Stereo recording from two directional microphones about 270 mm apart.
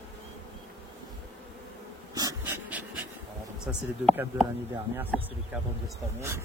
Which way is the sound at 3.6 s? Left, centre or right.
Centre.